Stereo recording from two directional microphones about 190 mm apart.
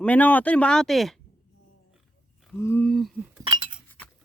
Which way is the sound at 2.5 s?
10° left (ahead or behind).